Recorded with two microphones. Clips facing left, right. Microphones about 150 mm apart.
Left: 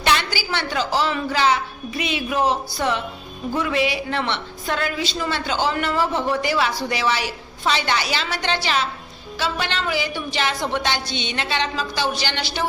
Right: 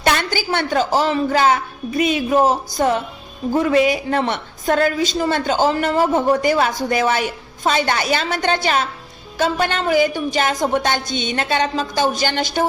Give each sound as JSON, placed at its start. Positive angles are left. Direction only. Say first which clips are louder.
{"t": 0.0, "sound": "a woman's voice", "louder": "right 3 dB", "side_deg": -45}